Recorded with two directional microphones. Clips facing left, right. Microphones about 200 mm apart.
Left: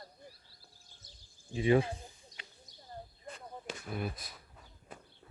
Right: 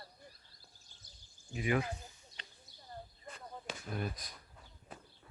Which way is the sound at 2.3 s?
15° left (ahead or behind).